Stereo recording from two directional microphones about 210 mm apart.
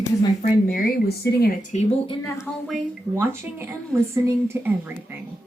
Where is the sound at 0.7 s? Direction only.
45° left (ahead or behind).